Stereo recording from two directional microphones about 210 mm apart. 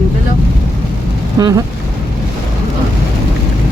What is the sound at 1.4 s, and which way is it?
Speech, 15° right (ahead or behind).